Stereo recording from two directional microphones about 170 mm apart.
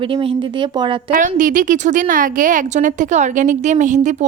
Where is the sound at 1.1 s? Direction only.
50° right (ahead or behind).